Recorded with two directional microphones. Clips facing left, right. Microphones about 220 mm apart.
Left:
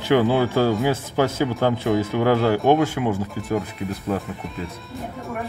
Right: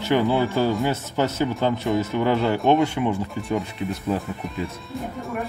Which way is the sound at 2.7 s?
5° left (ahead or behind).